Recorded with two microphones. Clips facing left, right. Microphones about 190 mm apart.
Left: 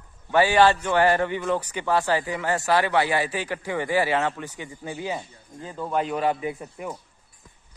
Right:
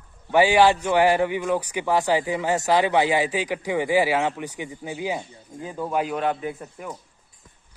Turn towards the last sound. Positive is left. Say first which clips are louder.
# left 1 dB
turn(degrees=0)  # may be behind; listen again after turning